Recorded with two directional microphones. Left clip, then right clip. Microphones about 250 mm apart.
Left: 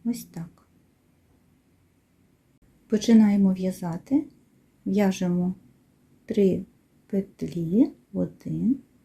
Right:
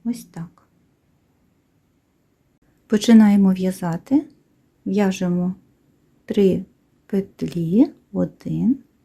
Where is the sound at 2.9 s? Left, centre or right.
Right.